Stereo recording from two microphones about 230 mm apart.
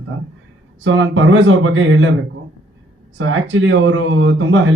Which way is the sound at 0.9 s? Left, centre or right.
Right.